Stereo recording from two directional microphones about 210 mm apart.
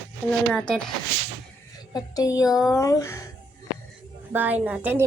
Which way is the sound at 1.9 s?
20° left (ahead or behind).